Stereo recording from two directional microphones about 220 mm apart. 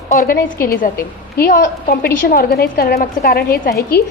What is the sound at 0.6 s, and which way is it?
A woman's voice, 40° left (ahead or behind).